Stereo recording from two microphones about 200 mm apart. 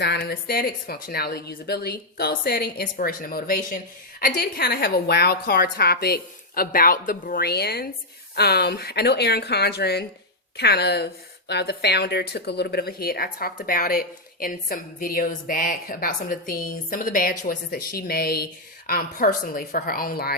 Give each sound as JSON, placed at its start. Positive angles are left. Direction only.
{"t": 0.0, "sound": "a woman's voice", "side_deg": 55}